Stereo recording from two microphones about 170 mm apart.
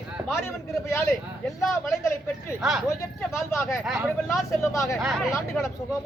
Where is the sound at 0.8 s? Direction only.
15° left (ahead or behind).